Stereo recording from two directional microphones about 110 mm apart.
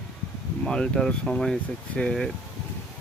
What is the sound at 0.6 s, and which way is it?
Speech, 5° left (ahead or behind).